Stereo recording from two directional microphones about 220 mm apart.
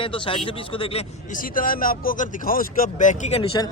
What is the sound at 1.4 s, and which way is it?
A man's voice, 40° left (ahead or behind).